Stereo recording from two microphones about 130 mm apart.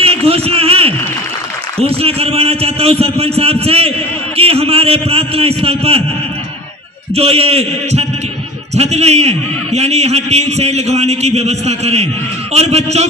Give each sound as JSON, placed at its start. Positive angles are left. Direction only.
{"t": 0.0, "sound": "a sound", "side_deg": -50}
{"t": 1.8, "sound": "a man's voice", "side_deg": -50}
{"t": 7.2, "sound": "a man's voice", "side_deg": -50}